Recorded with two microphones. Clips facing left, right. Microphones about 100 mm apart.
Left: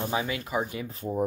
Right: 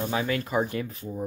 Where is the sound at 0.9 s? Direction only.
45° left (ahead or behind).